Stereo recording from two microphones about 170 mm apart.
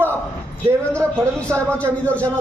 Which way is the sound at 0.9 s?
5° left (ahead or behind).